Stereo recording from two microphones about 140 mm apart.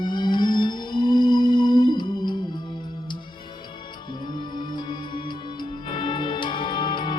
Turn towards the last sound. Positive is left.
turn(degrees=35)  # may be behind; listen again after turning